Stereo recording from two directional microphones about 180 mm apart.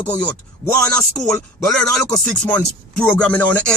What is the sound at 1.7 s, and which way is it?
Speech, 5° left (ahead or behind).